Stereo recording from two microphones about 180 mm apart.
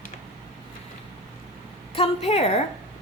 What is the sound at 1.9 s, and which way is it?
Speech, 35° left (ahead or behind).